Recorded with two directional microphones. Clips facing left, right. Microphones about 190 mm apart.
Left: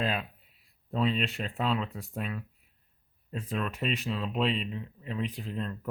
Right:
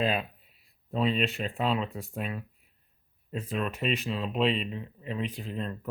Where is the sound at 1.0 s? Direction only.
5° right (ahead or behind).